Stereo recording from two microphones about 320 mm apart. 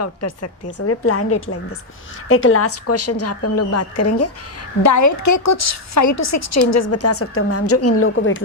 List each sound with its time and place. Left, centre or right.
0.0 s a woman's voice: left
4.8 s a woman's voice: left